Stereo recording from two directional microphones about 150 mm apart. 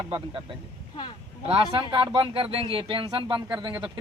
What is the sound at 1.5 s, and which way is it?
Speech, 40° right (ahead or behind).